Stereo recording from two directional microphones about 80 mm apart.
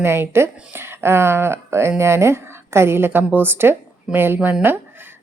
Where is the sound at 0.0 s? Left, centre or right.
Right.